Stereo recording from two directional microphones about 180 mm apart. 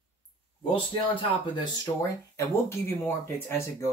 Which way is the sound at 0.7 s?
30° left (ahead or behind).